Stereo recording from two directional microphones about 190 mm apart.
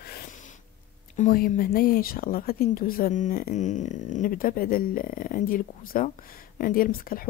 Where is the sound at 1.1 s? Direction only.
45° left (ahead or behind).